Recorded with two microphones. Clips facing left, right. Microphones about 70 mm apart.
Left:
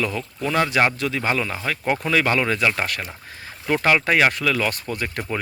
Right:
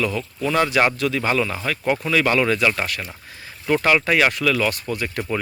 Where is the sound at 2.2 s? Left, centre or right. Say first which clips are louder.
Right 2 dB; left.